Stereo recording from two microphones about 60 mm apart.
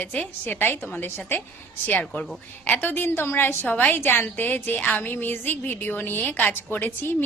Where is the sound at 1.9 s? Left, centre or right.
Centre.